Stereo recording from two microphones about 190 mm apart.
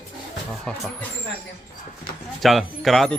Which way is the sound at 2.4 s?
Centre (ahead or behind).